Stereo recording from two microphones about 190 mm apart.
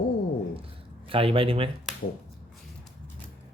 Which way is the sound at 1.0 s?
30° right (ahead or behind).